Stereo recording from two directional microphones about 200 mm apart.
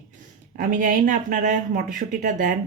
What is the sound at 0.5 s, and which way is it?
Speech, 40° right (ahead or behind).